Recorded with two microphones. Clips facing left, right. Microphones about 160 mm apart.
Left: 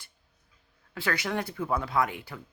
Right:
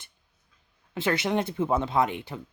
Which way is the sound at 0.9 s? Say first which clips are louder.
Right 5 dB; 20° right (ahead or behind).